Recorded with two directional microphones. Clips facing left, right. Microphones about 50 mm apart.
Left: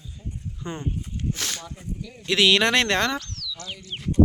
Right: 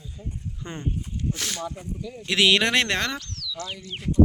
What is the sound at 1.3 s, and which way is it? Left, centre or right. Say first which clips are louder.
Speech: right 3 dB; centre.